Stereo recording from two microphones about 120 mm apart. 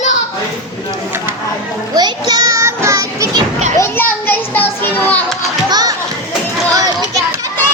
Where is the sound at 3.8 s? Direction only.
15° left (ahead or behind).